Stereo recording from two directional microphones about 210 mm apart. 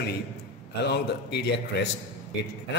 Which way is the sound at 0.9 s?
50° left (ahead or behind).